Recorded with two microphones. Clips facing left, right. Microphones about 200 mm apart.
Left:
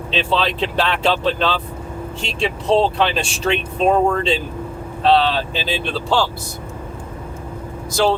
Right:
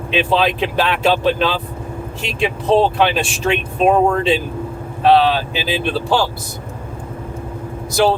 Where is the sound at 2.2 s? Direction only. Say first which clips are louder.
Right 2 dB; 30° left (ahead or behind).